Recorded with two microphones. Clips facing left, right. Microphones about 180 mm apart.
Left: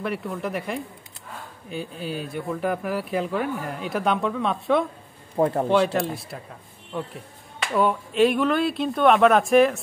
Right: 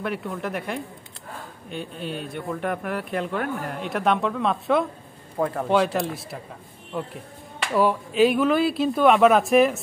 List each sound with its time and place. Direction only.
0.0 s speech: centre (ahead or behind)
5.4 s speech: 30° left (ahead or behind)
5.7 s speech: centre (ahead or behind)